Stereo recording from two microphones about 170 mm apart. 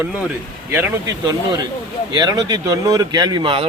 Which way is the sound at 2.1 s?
25° right (ahead or behind).